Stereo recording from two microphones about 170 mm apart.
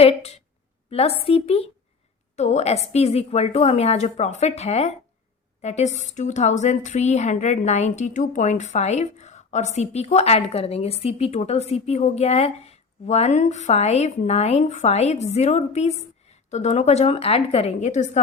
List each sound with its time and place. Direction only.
0.0 s a woman's voice: 35° left (ahead or behind)